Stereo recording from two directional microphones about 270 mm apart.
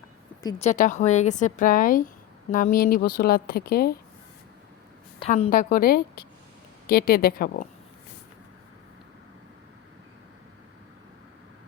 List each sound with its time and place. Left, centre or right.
0.4 s a woman's voice: left
5.2 s a woman's voice: left